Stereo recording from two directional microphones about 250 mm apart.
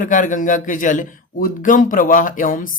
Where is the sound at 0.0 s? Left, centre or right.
Left.